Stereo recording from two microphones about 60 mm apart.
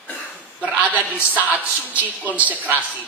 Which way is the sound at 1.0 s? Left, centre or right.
Right.